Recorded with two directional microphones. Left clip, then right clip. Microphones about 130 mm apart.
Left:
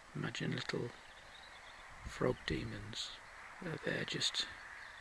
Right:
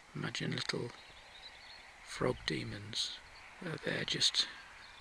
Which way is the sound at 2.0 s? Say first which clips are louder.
Right 2 dB; 5° right (ahead or behind).